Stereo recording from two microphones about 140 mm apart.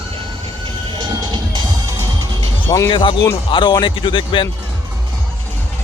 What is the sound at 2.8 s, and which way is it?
Speech, 35° left (ahead or behind).